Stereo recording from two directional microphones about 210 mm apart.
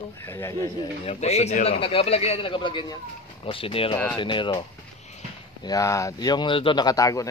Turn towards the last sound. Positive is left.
turn(degrees=15)  # may be behind; listen again after turning